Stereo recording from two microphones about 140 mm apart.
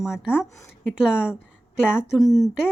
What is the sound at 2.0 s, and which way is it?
Speech, centre (ahead or behind).